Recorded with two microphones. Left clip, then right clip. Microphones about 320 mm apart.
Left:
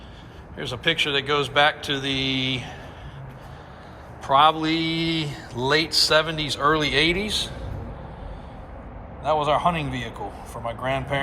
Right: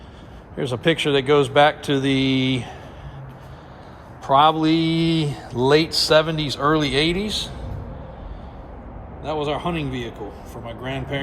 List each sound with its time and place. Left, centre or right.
0.5 s speech: right
4.2 s speech: centre
9.2 s a man's voice: centre